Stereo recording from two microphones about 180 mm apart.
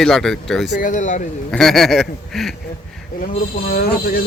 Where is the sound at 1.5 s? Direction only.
Centre (ahead or behind).